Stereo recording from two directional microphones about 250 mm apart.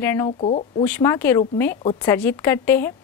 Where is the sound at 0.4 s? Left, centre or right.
Left.